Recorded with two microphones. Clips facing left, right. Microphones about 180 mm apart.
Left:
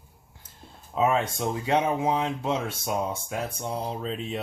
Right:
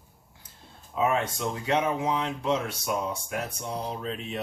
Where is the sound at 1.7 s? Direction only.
30° left (ahead or behind).